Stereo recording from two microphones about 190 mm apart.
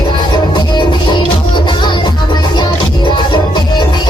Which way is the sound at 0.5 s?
25° left (ahead or behind).